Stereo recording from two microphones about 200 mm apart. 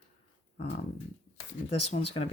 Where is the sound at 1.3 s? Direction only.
30° left (ahead or behind).